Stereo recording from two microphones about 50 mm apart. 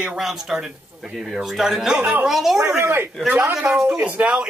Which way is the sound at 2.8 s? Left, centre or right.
Right.